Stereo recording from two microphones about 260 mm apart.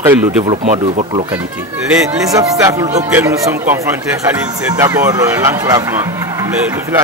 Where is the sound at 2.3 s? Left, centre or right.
Centre.